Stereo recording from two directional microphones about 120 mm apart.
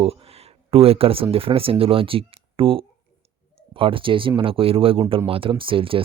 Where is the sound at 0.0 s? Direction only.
55° right (ahead or behind).